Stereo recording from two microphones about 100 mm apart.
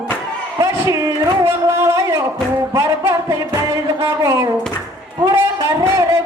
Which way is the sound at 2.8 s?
30° right (ahead or behind).